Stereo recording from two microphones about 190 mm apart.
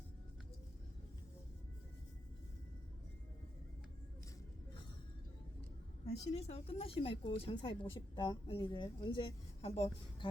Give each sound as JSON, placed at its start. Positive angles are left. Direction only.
{"t": 6.1, "sound": "speech", "side_deg": 30}